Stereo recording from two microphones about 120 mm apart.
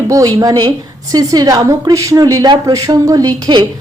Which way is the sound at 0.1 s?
30° right (ahead or behind).